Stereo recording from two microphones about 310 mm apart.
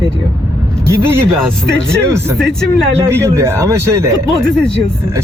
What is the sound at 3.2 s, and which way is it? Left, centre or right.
Speech, centre.